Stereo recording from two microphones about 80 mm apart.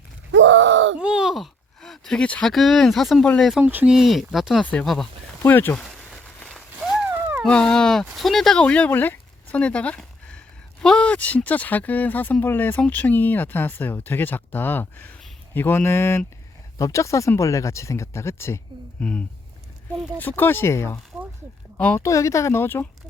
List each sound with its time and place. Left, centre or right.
0.9 s groan: centre
1.8 s speech: centre
2.5 s speech: centre
3.6 s speech: right
3.8 s speech: centre
4.6 s speech: centre
5.7 s a sound: centre
7.1 s a sound: right
7.4 s speech: centre
8.6 s speech: centre; by 18.6 s left
18.9 s speech: centre; by 20.9 s left
21.1 s a sound: centre
21.8 s a woman's voice: centre
22.0 s speech: left